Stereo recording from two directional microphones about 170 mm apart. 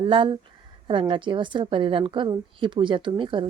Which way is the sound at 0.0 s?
30° right (ahead or behind).